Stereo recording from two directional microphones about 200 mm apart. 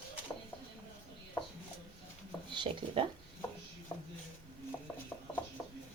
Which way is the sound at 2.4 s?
25° right (ahead or behind).